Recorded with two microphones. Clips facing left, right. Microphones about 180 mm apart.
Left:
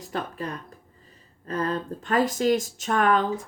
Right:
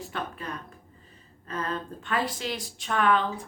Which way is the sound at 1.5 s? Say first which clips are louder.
Left 5 dB; 35° left (ahead or behind).